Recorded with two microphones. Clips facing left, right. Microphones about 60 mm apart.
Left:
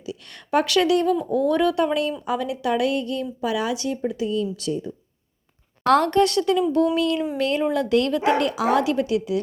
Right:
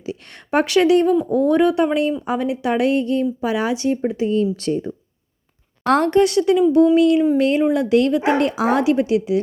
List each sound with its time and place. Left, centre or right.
0.0 s a sound: right
1.2 s speech: right
5.8 s speech: right